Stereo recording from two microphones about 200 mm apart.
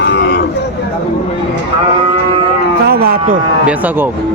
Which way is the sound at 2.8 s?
50° right (ahead or behind).